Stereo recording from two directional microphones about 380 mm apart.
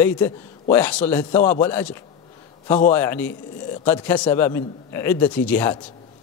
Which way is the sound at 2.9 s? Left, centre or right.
Centre.